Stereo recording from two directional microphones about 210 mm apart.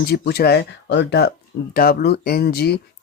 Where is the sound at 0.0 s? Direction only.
50° left (ahead or behind).